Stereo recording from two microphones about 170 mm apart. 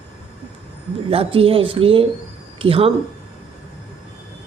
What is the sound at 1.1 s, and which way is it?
A woman's voice, 35° right (ahead or behind).